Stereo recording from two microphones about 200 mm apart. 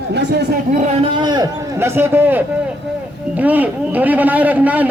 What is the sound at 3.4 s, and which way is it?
A man's voice, 10° right (ahead or behind).